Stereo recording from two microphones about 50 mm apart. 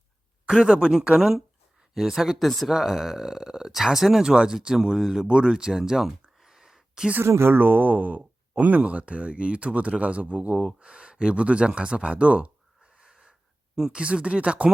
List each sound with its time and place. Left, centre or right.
0.9 s speech: centre
2.4 s speech: centre
2.7 s speech: centre
4.2 s speech: centre
4.9 s speech: centre
5.3 s speech: centre
6.4 s a sound: centre
7.3 s speech: right
7.5 s speech: right; by 14.0 s centre
14.0 s speech: right